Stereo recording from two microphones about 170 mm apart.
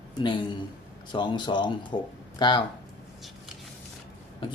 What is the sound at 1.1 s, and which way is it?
Speech, 25° left (ahead or behind).